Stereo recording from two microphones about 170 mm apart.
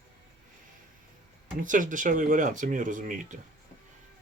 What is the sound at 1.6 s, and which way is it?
Speech, 50° right (ahead or behind).